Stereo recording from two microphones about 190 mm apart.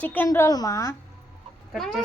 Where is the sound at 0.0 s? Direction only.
10° left (ahead or behind).